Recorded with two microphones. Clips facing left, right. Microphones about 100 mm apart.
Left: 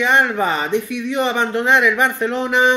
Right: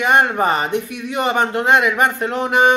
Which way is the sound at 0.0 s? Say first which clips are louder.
Right 1 dB; 50° right (ahead or behind).